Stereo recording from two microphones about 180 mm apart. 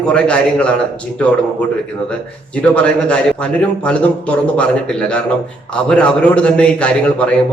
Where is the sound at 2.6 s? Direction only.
5° left (ahead or behind).